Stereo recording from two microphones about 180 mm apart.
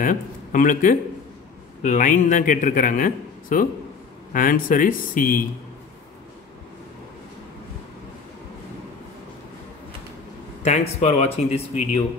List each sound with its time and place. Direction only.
0.0 s a man's voice: 50° left (ahead or behind)
10.6 s speech: 40° left (ahead or behind)